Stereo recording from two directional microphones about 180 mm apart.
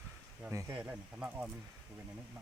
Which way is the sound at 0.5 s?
15° right (ahead or behind).